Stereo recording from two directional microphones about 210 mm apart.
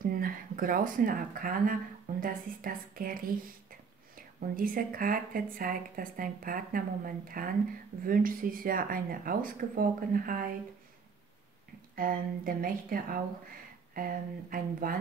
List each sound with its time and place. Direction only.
0.0 s speech: 40° right (ahead or behind)
4.4 s a woman's voice: 40° right (ahead or behind)
11.9 s a woman's voice: 40° right (ahead or behind)